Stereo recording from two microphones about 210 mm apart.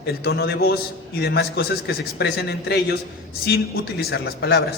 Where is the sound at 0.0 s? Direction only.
50° left (ahead or behind).